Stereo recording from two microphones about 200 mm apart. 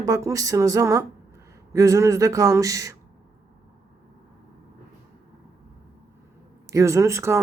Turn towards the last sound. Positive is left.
turn(degrees=-15)  # may be behind; listen again after turning